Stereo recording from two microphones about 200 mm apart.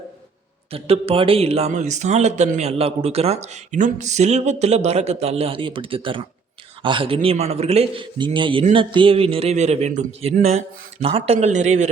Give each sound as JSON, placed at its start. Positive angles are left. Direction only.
{"t": 0.7, "sound": "a man's voice", "side_deg": -30}